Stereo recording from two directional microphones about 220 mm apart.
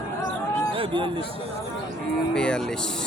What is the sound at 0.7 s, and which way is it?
Speech, 25° right (ahead or behind).